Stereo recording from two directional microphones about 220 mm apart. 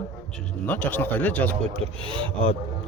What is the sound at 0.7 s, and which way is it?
Speech, 5° left (ahead or behind).